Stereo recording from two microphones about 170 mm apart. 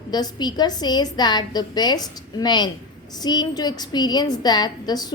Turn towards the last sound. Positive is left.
turn(degrees=25)  # may be behind; listen again after turning